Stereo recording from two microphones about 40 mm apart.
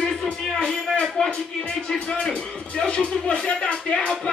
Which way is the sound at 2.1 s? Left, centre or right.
Left.